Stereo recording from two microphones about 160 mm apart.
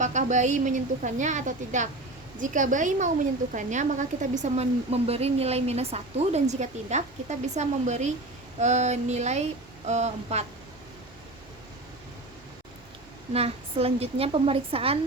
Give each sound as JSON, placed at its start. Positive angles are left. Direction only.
{"t": 0.0, "sound": "a woman's voice", "side_deg": -50}
{"t": 13.3, "sound": "a woman's voice", "side_deg": -40}